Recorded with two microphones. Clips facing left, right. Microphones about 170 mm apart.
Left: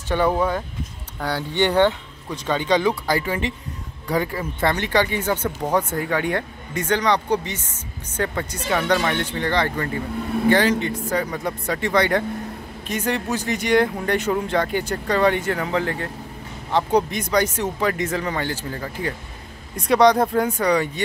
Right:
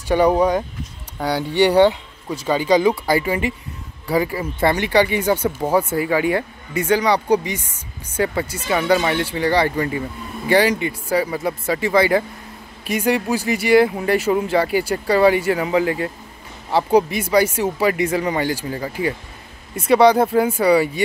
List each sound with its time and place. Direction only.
0.1 s speech: 15° right (ahead or behind)